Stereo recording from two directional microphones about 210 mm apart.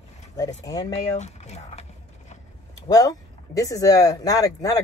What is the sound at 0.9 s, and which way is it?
Speech, 30° left (ahead or behind).